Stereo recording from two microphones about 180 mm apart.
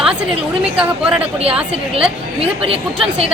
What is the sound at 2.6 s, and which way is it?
Speech, 30° right (ahead or behind).